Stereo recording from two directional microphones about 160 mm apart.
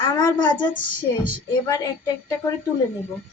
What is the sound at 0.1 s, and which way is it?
Speech, 25° left (ahead or behind).